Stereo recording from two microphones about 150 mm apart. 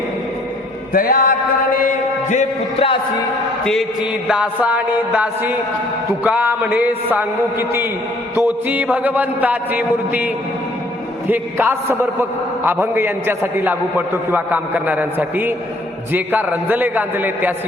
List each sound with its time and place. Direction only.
0.9 s a sound: 75° left (ahead or behind)
1.8 s a man's voice: 55° left (ahead or behind)
3.6 s chant: 5° left (ahead or behind)
4.3 s a man's voice: 10° right (ahead or behind)
8.4 s a man's voice: 10° right (ahead or behind)
11.3 s a man's voice: 15° right (ahead or behind)